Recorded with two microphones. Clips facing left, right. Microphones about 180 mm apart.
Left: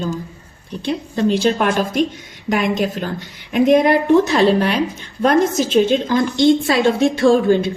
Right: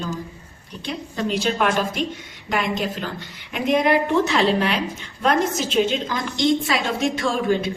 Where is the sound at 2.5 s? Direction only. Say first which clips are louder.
Left 6 dB; 45° left (ahead or behind).